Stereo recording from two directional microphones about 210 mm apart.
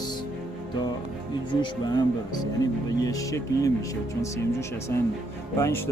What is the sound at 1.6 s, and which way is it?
Speech, 20° left (ahead or behind).